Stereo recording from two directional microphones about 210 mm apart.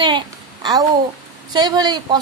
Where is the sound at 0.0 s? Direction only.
20° right (ahead or behind).